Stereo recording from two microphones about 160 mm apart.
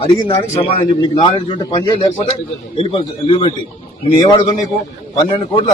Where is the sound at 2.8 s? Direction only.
35° left (ahead or behind).